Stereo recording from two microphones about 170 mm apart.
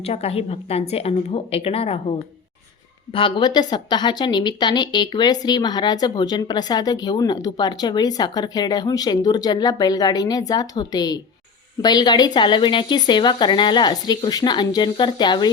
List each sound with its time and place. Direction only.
0.0 s a woman's voice: 35° left (ahead or behind)
3.1 s a woman's voice: 30° left (ahead or behind)